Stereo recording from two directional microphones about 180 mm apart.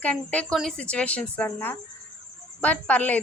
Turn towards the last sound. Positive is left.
turn(degrees=10)  # may be behind; listen again after turning